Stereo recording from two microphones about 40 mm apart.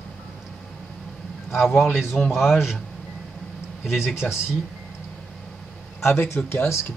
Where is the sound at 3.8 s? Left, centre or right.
Centre.